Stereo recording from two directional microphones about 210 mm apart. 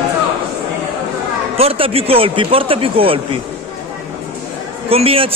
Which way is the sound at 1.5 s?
25° right (ahead or behind).